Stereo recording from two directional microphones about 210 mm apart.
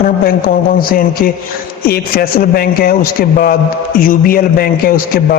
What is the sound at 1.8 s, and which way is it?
A man's voice, 45° left (ahead or behind).